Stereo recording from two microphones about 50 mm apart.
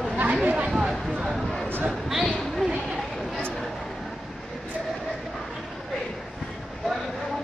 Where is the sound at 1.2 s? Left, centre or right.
Centre.